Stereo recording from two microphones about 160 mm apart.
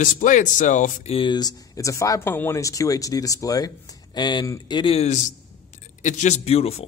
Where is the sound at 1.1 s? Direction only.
30° left (ahead or behind).